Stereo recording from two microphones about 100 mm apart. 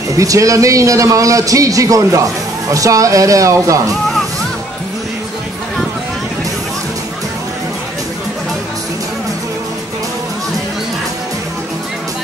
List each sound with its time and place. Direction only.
0.2 s a man's voice: 35° right (ahead or behind)